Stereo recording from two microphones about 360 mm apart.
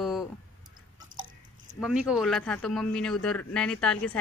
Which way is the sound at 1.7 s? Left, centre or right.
Centre.